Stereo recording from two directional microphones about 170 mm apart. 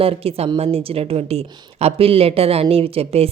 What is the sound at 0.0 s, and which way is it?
A woman's voice, 35° right (ahead or behind).